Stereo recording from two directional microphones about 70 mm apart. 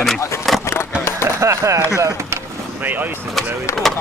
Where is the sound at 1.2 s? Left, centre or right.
Right.